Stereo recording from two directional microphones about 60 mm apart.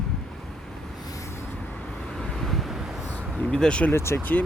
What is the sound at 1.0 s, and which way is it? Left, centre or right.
Vehicle, left.